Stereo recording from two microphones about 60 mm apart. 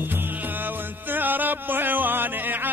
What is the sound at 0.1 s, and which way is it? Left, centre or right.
Music, right.